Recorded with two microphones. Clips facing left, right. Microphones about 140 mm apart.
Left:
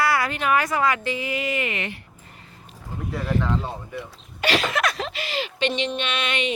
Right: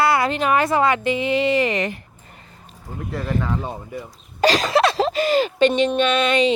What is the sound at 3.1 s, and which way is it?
Speech, centre (ahead or behind).